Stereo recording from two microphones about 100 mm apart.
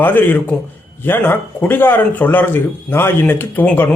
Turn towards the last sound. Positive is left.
turn(degrees=20)  # may be behind; listen again after turning